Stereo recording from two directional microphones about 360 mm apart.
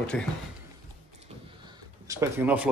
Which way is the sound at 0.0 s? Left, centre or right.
Centre.